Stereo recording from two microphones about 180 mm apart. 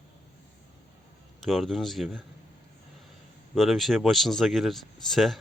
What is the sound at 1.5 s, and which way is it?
Speech, centre (ahead or behind).